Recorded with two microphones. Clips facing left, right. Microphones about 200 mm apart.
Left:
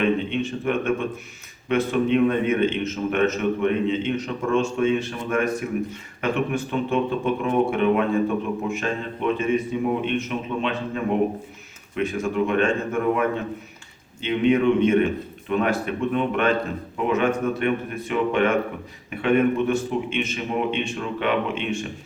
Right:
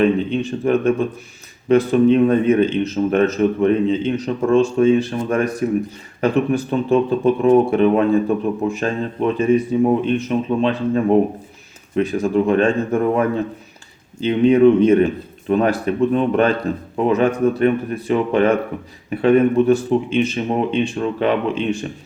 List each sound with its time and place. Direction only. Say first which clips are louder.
0.0 s a man's voice: right 5 dB; 35° right (ahead or behind)